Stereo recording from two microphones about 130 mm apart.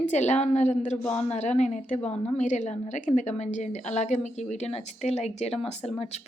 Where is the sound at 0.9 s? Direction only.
10° left (ahead or behind).